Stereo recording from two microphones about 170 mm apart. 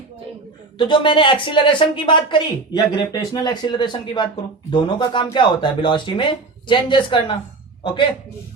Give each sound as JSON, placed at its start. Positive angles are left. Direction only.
{"t": 0.8, "sound": "speech", "side_deg": 30}